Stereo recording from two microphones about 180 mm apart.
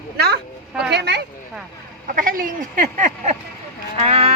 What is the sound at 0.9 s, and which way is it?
Speech, 70° right (ahead or behind).